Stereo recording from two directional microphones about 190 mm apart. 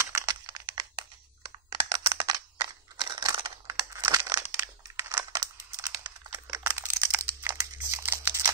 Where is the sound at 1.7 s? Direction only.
20° right (ahead or behind).